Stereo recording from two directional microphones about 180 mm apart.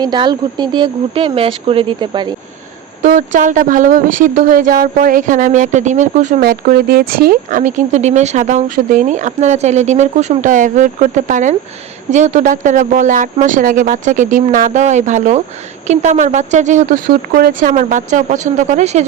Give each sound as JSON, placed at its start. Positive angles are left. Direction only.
{"t": 0.0, "sound": "speech", "side_deg": -25}
{"t": 3.0, "sound": "a woman's voice", "side_deg": -45}